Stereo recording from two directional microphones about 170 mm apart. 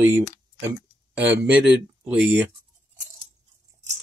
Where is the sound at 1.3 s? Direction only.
10° right (ahead or behind).